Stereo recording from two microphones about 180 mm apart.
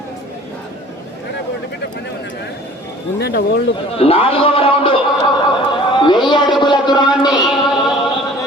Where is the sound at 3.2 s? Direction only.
65° left (ahead or behind).